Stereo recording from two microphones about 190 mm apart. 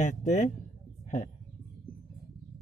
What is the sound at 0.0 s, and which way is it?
Speech, 40° left (ahead or behind).